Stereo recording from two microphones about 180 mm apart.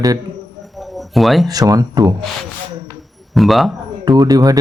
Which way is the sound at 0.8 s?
Centre (ahead or behind).